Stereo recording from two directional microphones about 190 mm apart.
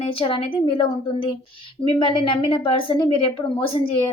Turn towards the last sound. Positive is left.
turn(degrees=25)  # may be behind; listen again after turning